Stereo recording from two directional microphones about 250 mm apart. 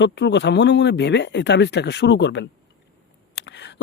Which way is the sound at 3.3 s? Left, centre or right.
Left.